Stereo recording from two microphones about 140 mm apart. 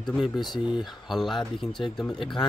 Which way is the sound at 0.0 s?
5° left (ahead or behind).